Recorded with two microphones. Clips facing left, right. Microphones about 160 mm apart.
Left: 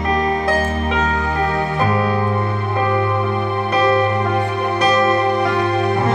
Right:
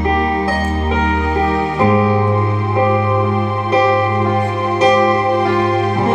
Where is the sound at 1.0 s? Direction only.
20° right (ahead or behind).